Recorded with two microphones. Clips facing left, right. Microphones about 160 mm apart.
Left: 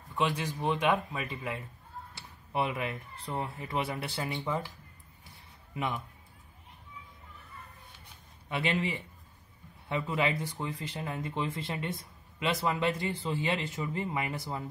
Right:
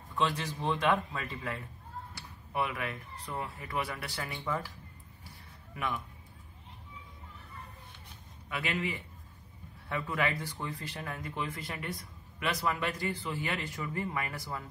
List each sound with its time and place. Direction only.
0.1 s a man's voice: 15° left (ahead or behind)
8.5 s speech: 30° left (ahead or behind)